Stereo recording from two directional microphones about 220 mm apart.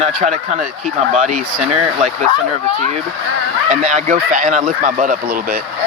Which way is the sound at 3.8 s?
35° right (ahead or behind).